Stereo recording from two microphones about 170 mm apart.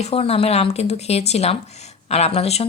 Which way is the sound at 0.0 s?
35° left (ahead or behind).